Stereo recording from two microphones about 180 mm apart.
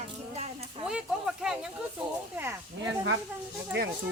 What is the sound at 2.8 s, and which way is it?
Speech, 90° right.